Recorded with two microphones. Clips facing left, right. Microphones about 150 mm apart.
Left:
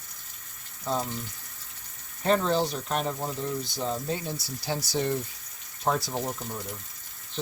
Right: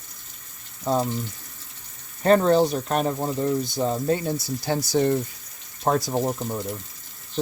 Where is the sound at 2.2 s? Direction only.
50° right (ahead or behind).